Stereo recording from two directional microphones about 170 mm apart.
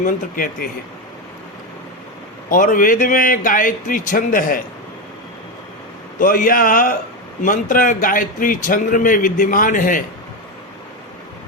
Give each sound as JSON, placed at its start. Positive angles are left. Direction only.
{"t": 0.0, "sound": "a man's voice", "side_deg": 55}
{"t": 2.5, "sound": "a man's voice", "side_deg": 50}
{"t": 6.1, "sound": "a man's voice", "side_deg": 55}